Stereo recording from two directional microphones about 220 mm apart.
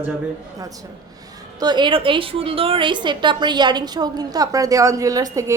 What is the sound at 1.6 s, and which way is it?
A woman's voice, 20° right (ahead or behind).